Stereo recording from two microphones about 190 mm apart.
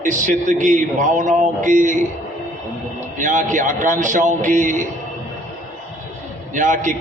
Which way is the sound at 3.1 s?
40° right (ahead or behind).